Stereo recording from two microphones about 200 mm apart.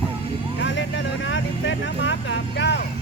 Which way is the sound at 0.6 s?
65° left (ahead or behind).